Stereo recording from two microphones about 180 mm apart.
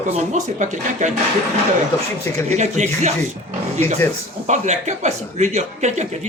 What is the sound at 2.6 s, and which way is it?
Speech, 40° right (ahead or behind).